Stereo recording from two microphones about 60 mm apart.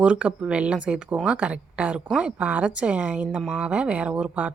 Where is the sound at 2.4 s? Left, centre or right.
Right.